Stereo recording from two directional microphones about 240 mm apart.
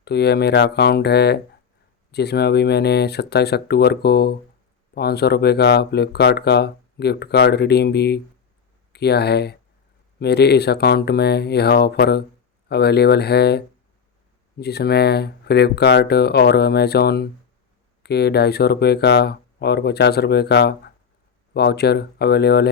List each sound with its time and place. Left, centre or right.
0.0 s speech: left